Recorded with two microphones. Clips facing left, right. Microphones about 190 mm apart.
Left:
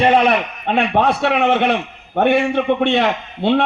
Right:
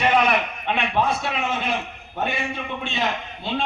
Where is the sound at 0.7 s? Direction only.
65° left (ahead or behind).